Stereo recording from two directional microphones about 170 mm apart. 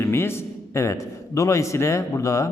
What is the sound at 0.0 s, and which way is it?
A man's voice, 15° left (ahead or behind).